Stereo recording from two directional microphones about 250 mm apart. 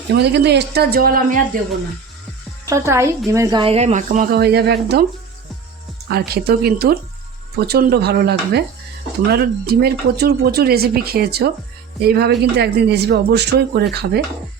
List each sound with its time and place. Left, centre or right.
0.2 s a man's voice: right
2.6 s a woman's voice: centre; by 5.0 s right
6.1 s a man's voice: right